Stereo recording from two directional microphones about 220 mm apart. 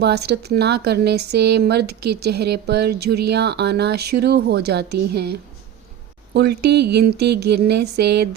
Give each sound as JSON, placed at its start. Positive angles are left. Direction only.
{"t": 0.0, "sound": "speech", "side_deg": -50}